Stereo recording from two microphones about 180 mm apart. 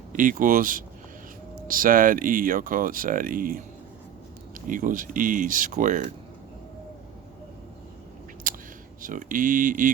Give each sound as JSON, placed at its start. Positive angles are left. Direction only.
{"t": 0.1, "sound": "speech", "side_deg": -45}
{"t": 8.4, "sound": "whispering", "side_deg": -50}
{"t": 9.0, "sound": "speech", "side_deg": -50}